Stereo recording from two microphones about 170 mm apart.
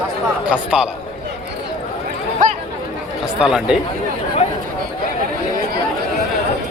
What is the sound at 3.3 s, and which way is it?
Speech, 5° right (ahead or behind).